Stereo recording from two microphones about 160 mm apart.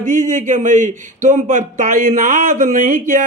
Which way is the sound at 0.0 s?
50° right (ahead or behind).